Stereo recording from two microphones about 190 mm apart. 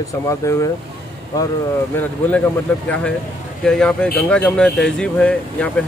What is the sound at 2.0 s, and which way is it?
Speech, 10° left (ahead or behind).